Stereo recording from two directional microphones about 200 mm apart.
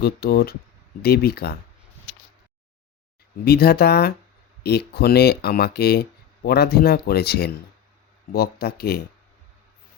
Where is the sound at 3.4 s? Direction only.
50° left (ahead or behind).